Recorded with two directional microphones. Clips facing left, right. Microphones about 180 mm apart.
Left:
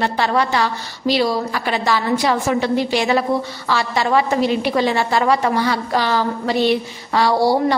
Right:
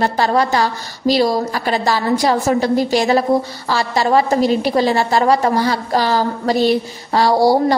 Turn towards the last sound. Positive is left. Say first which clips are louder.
# right 3 dB
turn(degrees=-40)  # may be behind; listen again after turning